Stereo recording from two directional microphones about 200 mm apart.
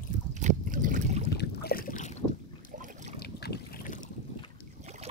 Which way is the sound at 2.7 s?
40° right (ahead or behind).